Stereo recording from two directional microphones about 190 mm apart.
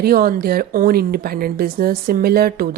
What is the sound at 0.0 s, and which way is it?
Speech, 50° right (ahead or behind).